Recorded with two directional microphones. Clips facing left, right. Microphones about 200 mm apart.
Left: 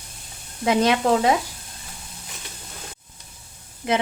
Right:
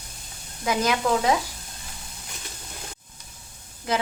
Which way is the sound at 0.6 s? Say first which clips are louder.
Left 5 dB; 25° left (ahead or behind).